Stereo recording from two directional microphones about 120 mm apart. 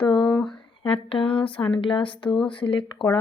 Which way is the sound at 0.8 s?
50° left (ahead or behind).